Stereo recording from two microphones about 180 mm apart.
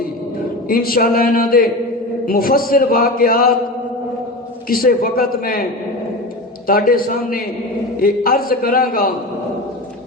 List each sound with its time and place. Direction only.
0.7 s a man's voice: 55° left (ahead or behind)
4.7 s a man's voice: 55° left (ahead or behind)
6.7 s a man's voice: 55° left (ahead or behind)